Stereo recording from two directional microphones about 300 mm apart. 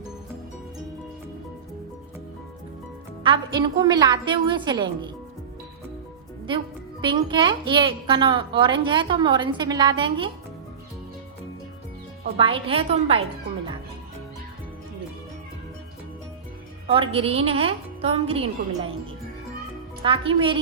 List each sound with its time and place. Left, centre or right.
3.2 s a woman's voice: centre
7.0 s a woman's voice: centre
12.2 s a woman's voice: centre
16.9 s a woman's voice: centre
20.0 s a woman's voice: centre